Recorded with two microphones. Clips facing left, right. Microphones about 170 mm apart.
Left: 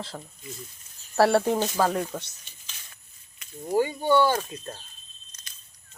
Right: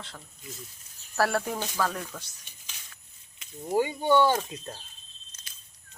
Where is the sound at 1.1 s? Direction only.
30° left (ahead or behind).